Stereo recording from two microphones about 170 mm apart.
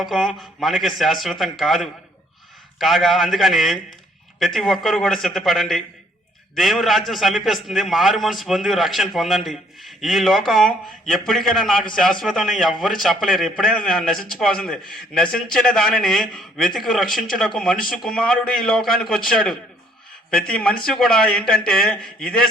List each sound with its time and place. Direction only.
0.0 s a man's voice: centre (ahead or behind)